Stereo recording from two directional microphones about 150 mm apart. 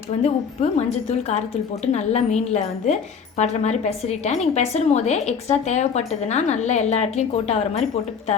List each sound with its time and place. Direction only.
0.2 s a woman's voice: 50° left (ahead or behind)